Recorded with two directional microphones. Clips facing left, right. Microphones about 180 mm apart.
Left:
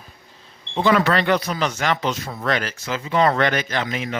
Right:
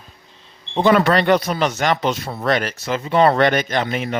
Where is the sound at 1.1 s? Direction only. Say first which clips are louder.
Right 3 dB; 25° right (ahead or behind).